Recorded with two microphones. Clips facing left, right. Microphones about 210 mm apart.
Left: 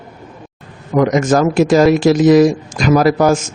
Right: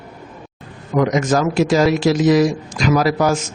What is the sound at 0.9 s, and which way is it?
A man's voice, 50° left (ahead or behind).